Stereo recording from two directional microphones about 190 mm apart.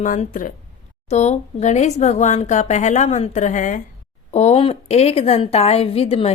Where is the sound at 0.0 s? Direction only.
45° left (ahead or behind).